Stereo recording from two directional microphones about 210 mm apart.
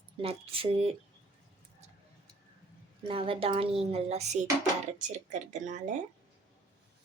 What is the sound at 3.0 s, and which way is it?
A woman's voice, 25° right (ahead or behind).